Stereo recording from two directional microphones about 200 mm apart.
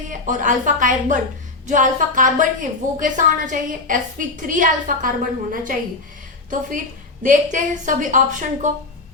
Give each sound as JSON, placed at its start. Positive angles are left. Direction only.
{"t": 0.3, "sound": "a woman's voice", "side_deg": -40}
{"t": 7.2, "sound": "a woman's voice", "side_deg": -40}